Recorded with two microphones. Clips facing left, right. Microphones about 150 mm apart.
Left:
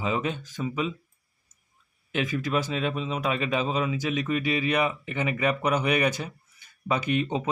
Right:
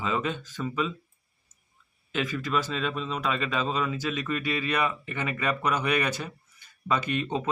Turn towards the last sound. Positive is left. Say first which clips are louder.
# left 2 dB
turn(degrees=15)  # may be behind; listen again after turning